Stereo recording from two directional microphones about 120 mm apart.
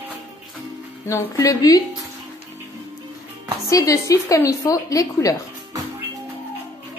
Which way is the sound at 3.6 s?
25° left (ahead or behind).